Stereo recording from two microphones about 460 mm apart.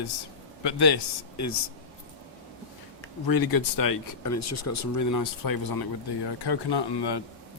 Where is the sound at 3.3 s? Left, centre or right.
Left.